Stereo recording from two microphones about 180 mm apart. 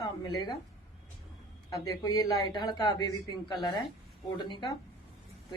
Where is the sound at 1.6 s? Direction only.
20° left (ahead or behind).